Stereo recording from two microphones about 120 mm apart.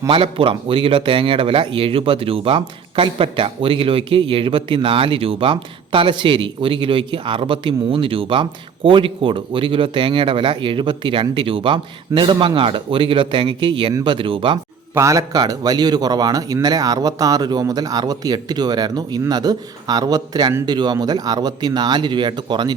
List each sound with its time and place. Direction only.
0.1 s speech: 50° right (ahead or behind)
14.9 s a man's voice: 25° right (ahead or behind)